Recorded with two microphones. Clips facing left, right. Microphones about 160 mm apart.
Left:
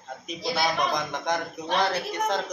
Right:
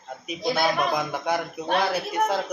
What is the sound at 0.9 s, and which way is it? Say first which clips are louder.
Speech: right 2 dB; 10° right (ahead or behind).